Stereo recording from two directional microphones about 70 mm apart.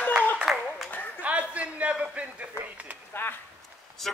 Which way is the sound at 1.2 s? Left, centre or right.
Centre.